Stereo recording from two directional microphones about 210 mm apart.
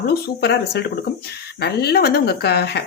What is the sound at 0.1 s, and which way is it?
Speech, 50° left (ahead or behind).